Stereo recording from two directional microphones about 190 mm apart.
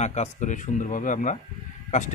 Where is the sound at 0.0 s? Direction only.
35° left (ahead or behind).